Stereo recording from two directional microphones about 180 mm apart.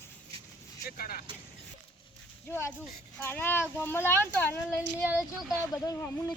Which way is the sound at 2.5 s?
10° left (ahead or behind).